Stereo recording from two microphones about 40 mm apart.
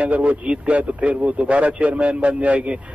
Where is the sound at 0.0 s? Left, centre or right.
Right.